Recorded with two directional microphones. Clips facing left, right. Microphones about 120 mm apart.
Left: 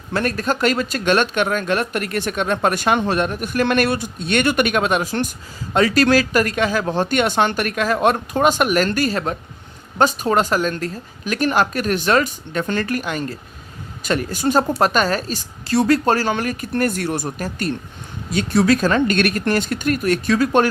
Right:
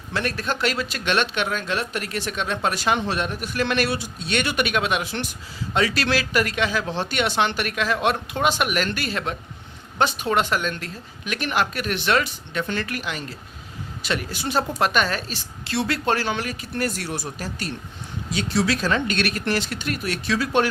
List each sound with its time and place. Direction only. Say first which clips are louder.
0.1 s a woman's voice: left 5 dB; 45° left (ahead or behind)